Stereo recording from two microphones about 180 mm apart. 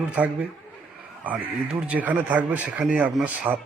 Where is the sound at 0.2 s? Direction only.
5° right (ahead or behind).